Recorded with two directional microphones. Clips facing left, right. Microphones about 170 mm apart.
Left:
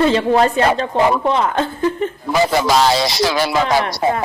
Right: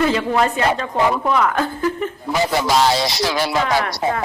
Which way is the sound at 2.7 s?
90° left.